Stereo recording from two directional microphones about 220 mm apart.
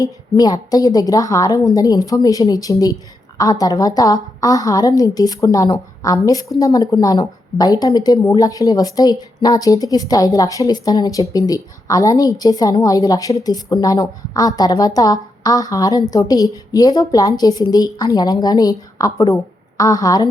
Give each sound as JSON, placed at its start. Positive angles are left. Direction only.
{"t": 0.0, "sound": "speech", "side_deg": 15}